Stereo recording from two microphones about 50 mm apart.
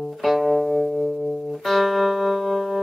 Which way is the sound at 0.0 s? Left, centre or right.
Centre.